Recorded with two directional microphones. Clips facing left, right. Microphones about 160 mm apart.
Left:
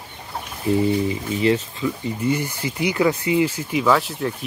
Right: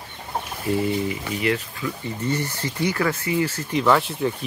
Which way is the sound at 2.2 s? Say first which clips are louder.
Left 3 dB; 10° left (ahead or behind).